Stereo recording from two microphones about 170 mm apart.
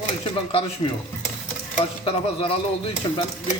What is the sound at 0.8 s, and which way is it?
Speech, 25° left (ahead or behind).